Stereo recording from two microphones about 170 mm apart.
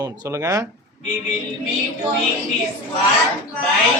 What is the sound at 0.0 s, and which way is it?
Speech, 20° right (ahead or behind).